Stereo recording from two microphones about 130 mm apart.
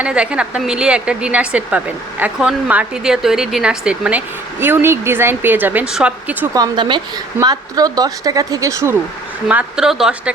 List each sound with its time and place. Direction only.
0.0 s a woman's voice: 10° right (ahead or behind)
4.6 s a woman's voice: 15° right (ahead or behind)
6.5 s speech: 35° right (ahead or behind)
9.5 s a woman's voice: 10° right (ahead or behind)